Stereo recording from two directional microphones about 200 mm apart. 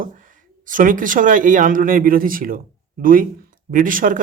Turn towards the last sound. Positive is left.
turn(degrees=-45)  # may be behind; listen again after turning